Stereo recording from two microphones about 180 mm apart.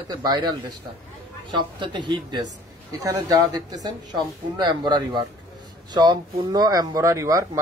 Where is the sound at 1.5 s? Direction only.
25° right (ahead or behind).